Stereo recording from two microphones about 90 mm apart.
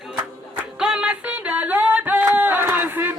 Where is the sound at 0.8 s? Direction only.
10° right (ahead or behind).